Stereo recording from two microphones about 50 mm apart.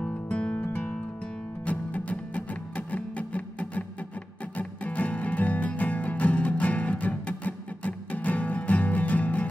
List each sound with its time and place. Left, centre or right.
0.0 s music: left
1.7 s music: left